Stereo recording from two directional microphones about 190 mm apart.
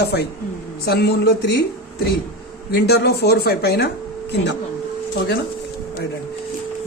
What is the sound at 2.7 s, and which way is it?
Speech, 60° left (ahead or behind).